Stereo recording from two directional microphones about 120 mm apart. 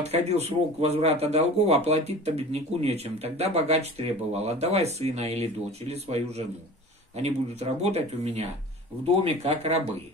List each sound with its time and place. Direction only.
0.0 s speech: 65° right (ahead or behind)
7.8 s speech: 60° right (ahead or behind)